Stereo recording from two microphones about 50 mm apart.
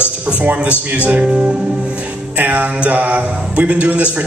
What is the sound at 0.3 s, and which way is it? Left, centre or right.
A man's voice, right.